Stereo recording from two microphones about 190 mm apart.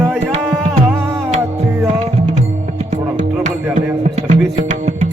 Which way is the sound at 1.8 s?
35° right (ahead or behind).